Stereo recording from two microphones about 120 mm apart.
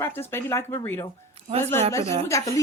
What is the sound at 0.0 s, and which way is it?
Speech, 20° left (ahead or behind).